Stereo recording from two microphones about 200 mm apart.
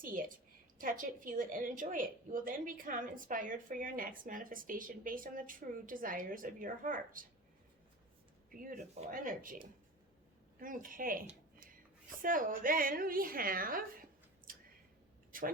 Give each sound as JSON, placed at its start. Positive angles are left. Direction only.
{"t": 0.0, "sound": "a sound", "side_deg": -45}
{"t": 0.8, "sound": "a woman's voice", "side_deg": -40}
{"t": 8.4, "sound": "a woman's voice", "side_deg": -45}
{"t": 12.2, "sound": "a woman's voice", "side_deg": -45}